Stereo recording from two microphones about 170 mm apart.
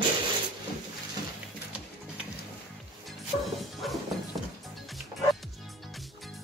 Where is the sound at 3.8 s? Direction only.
Centre (ahead or behind).